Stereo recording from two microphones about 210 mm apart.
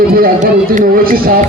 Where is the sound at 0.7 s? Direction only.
45° right (ahead or behind).